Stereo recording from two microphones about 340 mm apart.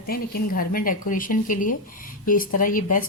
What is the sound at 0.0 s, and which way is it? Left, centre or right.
Speech, left.